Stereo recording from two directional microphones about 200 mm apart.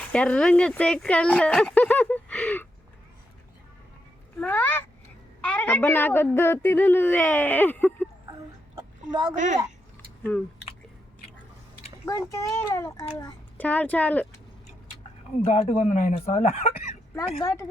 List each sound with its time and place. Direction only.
0.1 s speech: 5° left (ahead or behind)
4.4 s a woman's voice: 10° left (ahead or behind)
8.7 s a sound: 20° right (ahead or behind)
9.3 s a woman's voice: 35° right (ahead or behind)
12.0 s a woman's voice: 15° left (ahead or behind)
15.6 s speech: 35° left (ahead or behind)
17.4 s a woman's voice: 15° left (ahead or behind)